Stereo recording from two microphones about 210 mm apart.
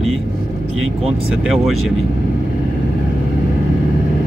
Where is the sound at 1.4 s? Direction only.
Centre (ahead or behind).